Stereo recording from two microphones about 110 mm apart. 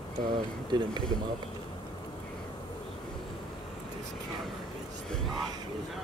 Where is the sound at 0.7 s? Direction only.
40° right (ahead or behind).